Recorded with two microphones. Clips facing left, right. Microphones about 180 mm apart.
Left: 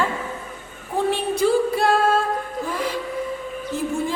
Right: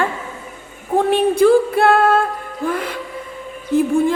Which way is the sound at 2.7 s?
55° right (ahead or behind).